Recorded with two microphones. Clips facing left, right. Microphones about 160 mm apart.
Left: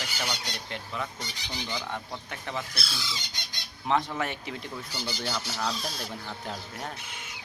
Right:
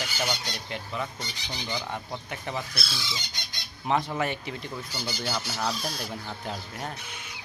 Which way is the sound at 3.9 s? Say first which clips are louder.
Right 1 dB; 10° right (ahead or behind).